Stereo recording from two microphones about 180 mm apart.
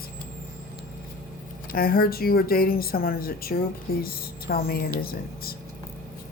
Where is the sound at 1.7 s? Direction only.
55° left (ahead or behind).